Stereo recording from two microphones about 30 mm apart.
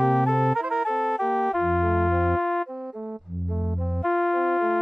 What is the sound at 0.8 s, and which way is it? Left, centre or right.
Music, centre.